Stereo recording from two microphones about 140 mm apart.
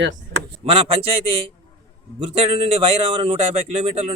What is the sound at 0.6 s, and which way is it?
Speech, 45° right (ahead or behind).